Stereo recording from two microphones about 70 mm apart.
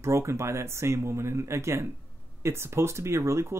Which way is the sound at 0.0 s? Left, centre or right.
Right.